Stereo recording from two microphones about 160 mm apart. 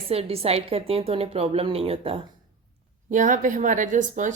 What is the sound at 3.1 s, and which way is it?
Speech, 55° right (ahead or behind).